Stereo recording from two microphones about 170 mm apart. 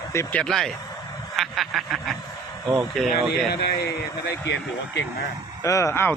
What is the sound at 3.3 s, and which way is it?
A man's voice, 70° left (ahead or behind).